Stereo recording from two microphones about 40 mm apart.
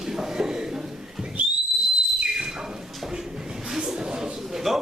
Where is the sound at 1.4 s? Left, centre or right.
Right.